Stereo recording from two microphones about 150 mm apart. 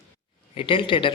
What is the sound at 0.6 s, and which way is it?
Speech, 35° left (ahead or behind).